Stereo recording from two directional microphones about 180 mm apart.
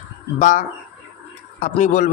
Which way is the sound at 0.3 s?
45° left (ahead or behind).